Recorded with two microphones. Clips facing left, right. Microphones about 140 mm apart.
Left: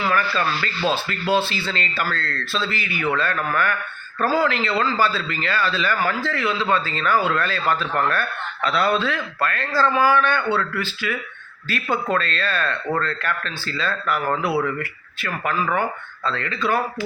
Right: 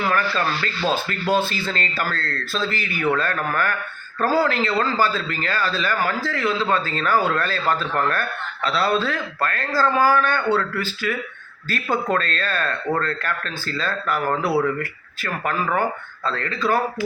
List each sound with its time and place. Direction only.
1.3 s a man's voice: 45° right (ahead or behind)